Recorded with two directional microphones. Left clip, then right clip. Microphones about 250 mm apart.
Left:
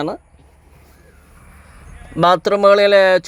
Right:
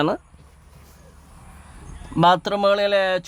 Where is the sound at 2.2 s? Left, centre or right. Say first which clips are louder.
Left 5 dB; centre.